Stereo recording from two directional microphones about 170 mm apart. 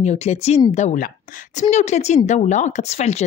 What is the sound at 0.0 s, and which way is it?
A woman's voice, 40° left (ahead or behind).